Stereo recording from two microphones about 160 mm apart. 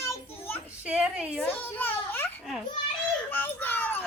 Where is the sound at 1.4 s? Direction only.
10° left (ahead or behind).